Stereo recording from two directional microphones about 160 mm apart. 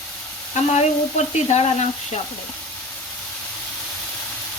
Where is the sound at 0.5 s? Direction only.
45° left (ahead or behind).